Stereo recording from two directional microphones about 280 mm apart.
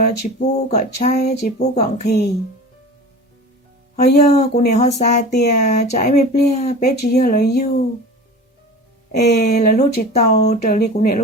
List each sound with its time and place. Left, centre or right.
0.0 s speech: left
4.1 s speech: left
6.8 s speech: left
9.1 s speech: left